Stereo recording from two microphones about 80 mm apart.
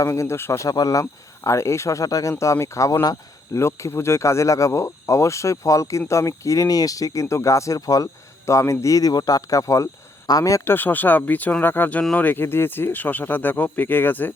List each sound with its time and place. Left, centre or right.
0.0 s speech: left
1.5 s speech: left
3.0 s speech: left
3.6 s speech: left
10.7 s speech: left